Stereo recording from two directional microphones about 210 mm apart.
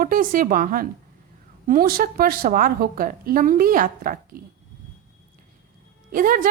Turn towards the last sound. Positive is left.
turn(degrees=-40)  # may be behind; listen again after turning